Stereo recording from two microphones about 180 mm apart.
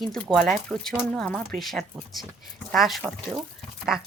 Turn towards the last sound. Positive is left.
turn(degrees=-5)  # may be behind; listen again after turning